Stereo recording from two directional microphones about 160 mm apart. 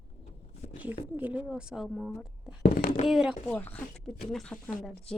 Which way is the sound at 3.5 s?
10° left (ahead or behind).